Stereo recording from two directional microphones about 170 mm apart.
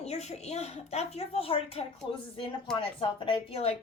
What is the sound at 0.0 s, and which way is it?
A woman's voice, 40° left (ahead or behind).